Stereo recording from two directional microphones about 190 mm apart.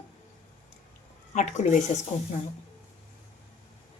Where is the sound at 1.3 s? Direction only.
40° left (ahead or behind).